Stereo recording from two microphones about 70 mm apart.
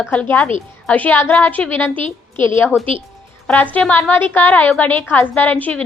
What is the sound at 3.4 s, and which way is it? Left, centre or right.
A woman's voice, left.